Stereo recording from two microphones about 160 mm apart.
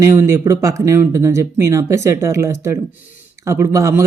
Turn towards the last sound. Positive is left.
turn(degrees=-15)  # may be behind; listen again after turning